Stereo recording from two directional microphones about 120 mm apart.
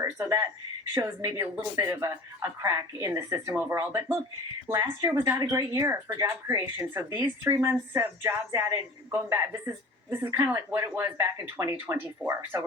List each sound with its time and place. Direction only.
0.0 s speech: 30° right (ahead or behind)